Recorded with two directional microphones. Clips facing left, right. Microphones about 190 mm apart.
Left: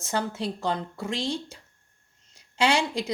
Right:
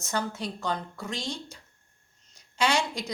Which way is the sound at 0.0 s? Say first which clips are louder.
Left 3 dB; 25° left (ahead or behind).